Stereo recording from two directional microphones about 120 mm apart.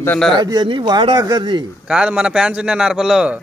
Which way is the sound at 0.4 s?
40° right (ahead or behind).